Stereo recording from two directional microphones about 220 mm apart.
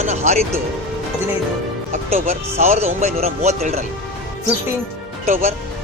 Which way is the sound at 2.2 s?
30° right (ahead or behind).